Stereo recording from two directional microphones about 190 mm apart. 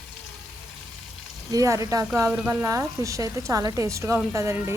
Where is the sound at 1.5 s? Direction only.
15° right (ahead or behind).